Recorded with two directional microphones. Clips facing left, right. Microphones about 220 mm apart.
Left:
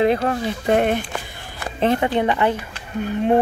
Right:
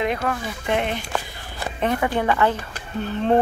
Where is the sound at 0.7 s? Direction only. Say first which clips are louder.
Left 6 dB; 50° left (ahead or behind).